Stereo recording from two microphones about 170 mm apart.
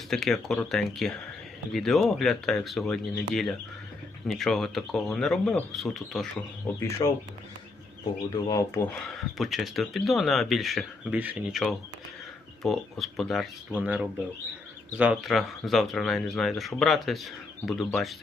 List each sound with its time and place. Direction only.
0.1 s speech: centre (ahead or behind)
6.7 s speech: 15° left (ahead or behind)
8.3 s speech: 20° left (ahead or behind)
8.9 s speech: centre (ahead or behind)
12.6 s speech: centre (ahead or behind)